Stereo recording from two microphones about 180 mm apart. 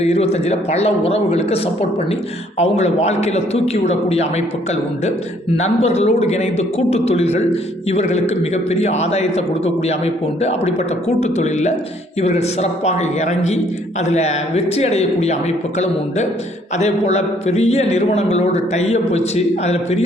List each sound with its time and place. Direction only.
0.0 s a man's voice: 35° left (ahead or behind)
2.6 s a man's voice: 35° left (ahead or behind)
5.5 s a man's voice: 35° left (ahead or behind)
11.2 s a man's voice: 40° left (ahead or behind)
16.7 s a man's voice: 35° left (ahead or behind)